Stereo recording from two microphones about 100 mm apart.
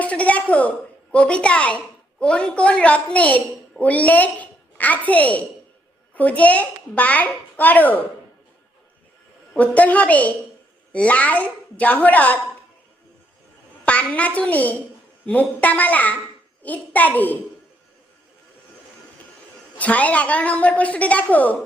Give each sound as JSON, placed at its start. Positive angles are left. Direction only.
{"t": 0.0, "sound": "a sound", "side_deg": 15}
{"t": 1.1, "sound": "a woman's voice", "side_deg": 10}
{"t": 9.5, "sound": "a woman's voice", "side_deg": 15}
{"t": 13.8, "sound": "a child's voice", "side_deg": 15}
{"t": 19.8, "sound": "a woman's voice", "side_deg": 15}